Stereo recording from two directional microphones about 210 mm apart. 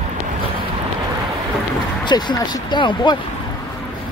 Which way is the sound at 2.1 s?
20° left (ahead or behind).